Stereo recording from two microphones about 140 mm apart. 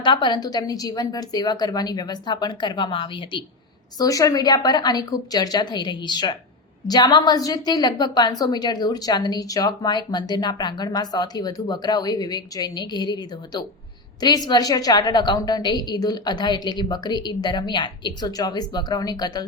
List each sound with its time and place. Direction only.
0.0 s a woman's voice: 35° left (ahead or behind)
3.9 s a woman's voice: 25° left (ahead or behind)